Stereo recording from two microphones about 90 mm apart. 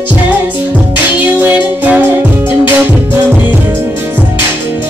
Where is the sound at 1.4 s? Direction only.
20° right (ahead or behind).